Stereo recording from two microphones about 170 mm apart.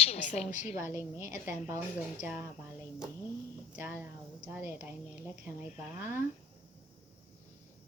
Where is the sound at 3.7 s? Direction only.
10° right (ahead or behind).